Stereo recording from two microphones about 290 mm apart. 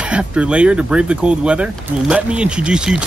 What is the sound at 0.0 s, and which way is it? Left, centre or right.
Speech, centre.